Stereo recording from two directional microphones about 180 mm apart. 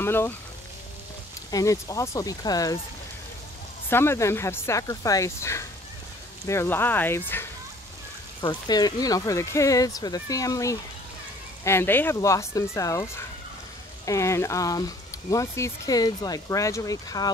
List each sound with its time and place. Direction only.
0.0 s speech: 15° left (ahead or behind)
1.5 s speech: 20° left (ahead or behind)
3.9 s speech: 15° left (ahead or behind)
8.4 s speech: 25° left (ahead or behind)
14.0 s speech: 15° left (ahead or behind)